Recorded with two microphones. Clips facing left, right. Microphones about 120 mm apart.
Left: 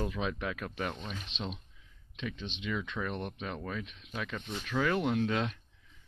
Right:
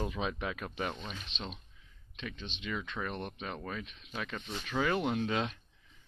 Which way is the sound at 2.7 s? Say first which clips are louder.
Left 2 dB; centre (ahead or behind).